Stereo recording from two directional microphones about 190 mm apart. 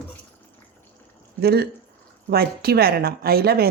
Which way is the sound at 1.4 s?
55° right (ahead or behind).